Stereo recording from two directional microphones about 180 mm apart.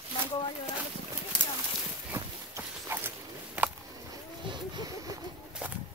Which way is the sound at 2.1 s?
15° right (ahead or behind).